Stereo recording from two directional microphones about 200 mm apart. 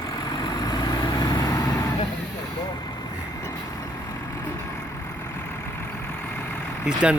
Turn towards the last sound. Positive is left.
turn(degrees=-5)  # may be behind; listen again after turning